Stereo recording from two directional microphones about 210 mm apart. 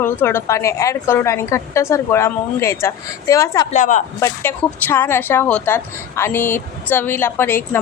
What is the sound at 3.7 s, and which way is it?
Speech, 35° left (ahead or behind).